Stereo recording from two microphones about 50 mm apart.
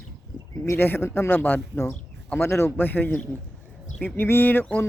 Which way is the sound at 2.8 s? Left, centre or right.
Left.